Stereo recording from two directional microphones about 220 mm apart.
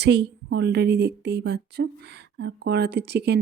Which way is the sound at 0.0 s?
50° right (ahead or behind).